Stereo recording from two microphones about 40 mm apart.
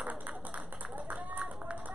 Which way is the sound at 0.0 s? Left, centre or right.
Right.